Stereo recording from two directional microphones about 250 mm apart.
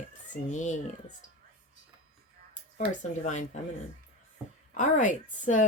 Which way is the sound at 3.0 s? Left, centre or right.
Left.